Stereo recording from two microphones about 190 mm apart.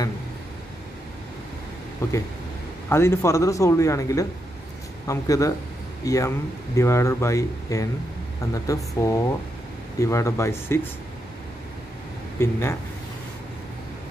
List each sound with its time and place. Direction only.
2.0 s speech: 15° left (ahead or behind)
12.4 s speech: 15° left (ahead or behind)